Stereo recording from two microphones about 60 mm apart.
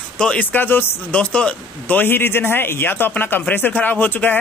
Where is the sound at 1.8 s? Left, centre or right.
Left.